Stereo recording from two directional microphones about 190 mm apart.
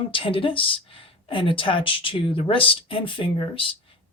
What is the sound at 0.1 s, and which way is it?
Speech, 30° left (ahead or behind).